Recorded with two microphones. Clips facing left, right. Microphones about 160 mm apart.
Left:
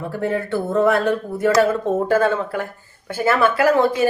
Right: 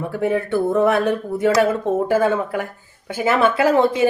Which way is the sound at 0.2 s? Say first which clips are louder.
Right 3 dB; 10° right (ahead or behind).